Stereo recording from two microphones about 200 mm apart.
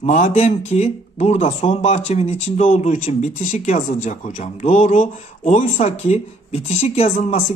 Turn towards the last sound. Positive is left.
turn(degrees=35)  # may be behind; listen again after turning